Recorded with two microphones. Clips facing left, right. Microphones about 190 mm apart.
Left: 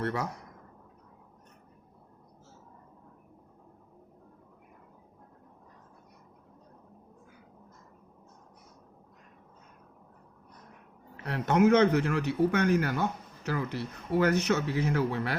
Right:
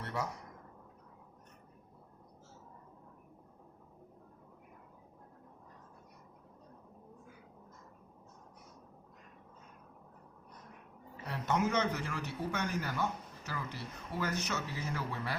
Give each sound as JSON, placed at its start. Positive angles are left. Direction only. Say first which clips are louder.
{"t": 0.0, "sound": "speech", "louder": "left 7 dB", "side_deg": 75}
{"t": 11.3, "sound": "speech", "louder": "left 10 dB", "side_deg": 65}